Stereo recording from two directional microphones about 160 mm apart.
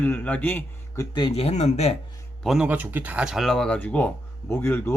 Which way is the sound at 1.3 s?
40° left (ahead or behind).